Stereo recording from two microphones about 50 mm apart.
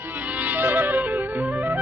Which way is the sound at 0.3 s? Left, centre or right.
Right.